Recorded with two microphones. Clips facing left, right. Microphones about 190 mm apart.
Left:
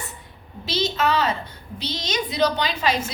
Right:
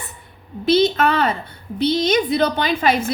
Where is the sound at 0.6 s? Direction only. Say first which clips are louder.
Right 8 dB; 55° right (ahead or behind).